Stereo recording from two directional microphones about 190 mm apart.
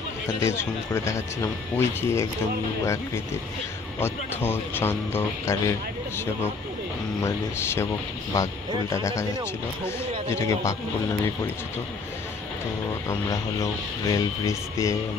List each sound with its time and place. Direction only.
0.5 s speech: 15° left (ahead or behind)
4.0 s speech: 10° left (ahead or behind)
7.2 s speech: 15° left (ahead or behind)
13.1 s speech: 20° left (ahead or behind)